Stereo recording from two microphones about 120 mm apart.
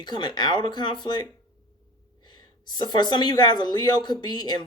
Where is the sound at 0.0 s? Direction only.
35° left (ahead or behind).